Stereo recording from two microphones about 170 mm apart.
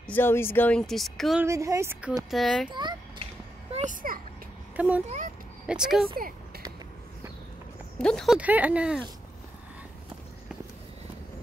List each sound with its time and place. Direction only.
0.0 s speech: 10° left (ahead or behind)
1.4 s speech: 20° right (ahead or behind)
2.3 s speech: centre (ahead or behind)
2.7 s a sound: 25° right (ahead or behind)
3.7 s a sound: 50° right (ahead or behind)
4.7 s speech: 10° right (ahead or behind)
8.0 s speech: 5° left (ahead or behind)
8.4 s speech: 10° right (ahead or behind)